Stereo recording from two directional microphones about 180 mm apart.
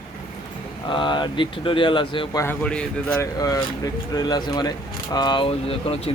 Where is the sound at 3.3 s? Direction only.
20° left (ahead or behind).